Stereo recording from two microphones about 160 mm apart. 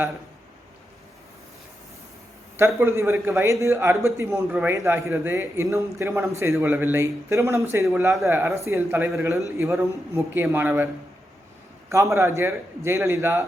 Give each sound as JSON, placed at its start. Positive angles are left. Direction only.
{"t": 2.6, "sound": "a man's voice", "side_deg": -15}
{"t": 11.9, "sound": "a man's voice", "side_deg": -20}